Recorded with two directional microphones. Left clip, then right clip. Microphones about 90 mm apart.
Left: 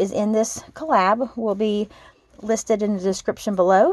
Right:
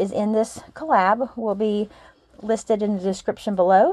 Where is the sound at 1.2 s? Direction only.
50° left (ahead or behind).